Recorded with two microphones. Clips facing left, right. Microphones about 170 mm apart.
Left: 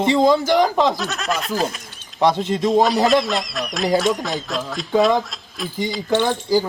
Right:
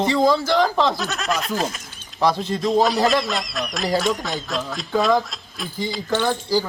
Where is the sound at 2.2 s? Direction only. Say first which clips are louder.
Left 3 dB; 20° left (ahead or behind).